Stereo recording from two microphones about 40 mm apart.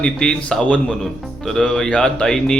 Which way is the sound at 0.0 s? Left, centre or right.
Left.